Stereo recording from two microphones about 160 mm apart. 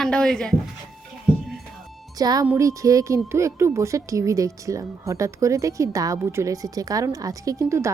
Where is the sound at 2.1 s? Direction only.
25° right (ahead or behind).